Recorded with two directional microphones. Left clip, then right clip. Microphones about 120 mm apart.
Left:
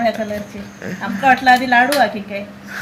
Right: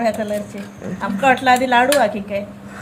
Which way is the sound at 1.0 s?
25° right (ahead or behind).